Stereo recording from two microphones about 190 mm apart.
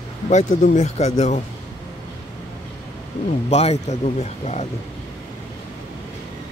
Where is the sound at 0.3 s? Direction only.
40° left (ahead or behind).